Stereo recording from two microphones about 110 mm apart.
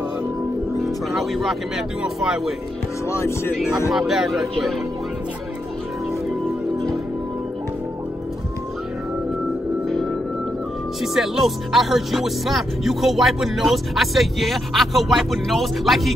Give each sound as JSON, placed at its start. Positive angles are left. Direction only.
{"t": 0.8, "sound": "speech", "side_deg": 0}
{"t": 3.1, "sound": "speech", "side_deg": 25}
{"t": 3.9, "sound": "speech", "side_deg": 0}
{"t": 9.8, "sound": "music", "side_deg": 0}
{"t": 11.0, "sound": "speech", "side_deg": -5}